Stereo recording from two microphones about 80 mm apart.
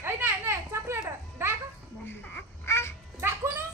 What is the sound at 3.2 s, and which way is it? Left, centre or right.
Music, right.